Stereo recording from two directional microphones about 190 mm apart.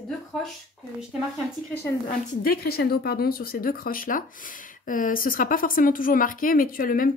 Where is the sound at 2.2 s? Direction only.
50° left (ahead or behind).